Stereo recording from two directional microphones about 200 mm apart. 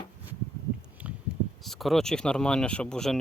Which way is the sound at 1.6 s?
Centre (ahead or behind).